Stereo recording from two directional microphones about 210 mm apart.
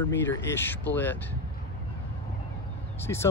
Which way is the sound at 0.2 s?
10° left (ahead or behind).